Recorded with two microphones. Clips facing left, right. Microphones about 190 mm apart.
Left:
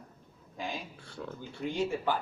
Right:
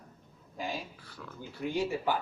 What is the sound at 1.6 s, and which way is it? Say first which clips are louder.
Speech: even; 10° right (ahead or behind).